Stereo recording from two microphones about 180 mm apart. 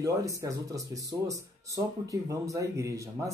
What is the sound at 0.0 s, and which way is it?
Speech, 15° right (ahead or behind).